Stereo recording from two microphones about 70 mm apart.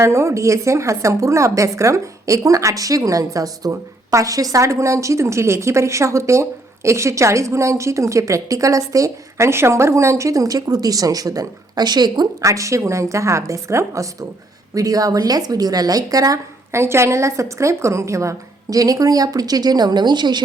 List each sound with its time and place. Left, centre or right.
0.0 s a woman's voice: right
12.4 s a woman's voice: right
16.7 s a woman's voice: right